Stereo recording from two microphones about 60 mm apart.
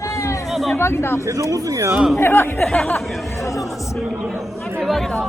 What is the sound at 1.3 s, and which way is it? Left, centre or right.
Speech, right.